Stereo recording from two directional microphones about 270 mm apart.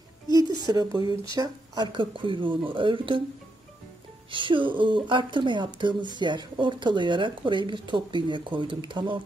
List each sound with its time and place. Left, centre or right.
0.4 s a sound: centre
1.3 s speech: centre
4.3 s speech: centre